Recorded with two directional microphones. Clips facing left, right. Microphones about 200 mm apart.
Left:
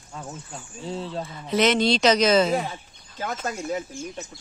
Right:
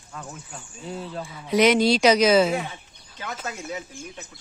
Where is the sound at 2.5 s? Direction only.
35° left (ahead or behind).